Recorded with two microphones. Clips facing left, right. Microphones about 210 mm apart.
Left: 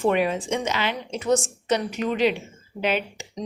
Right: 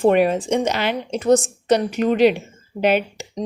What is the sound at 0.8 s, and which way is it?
Speech, 65° right (ahead or behind).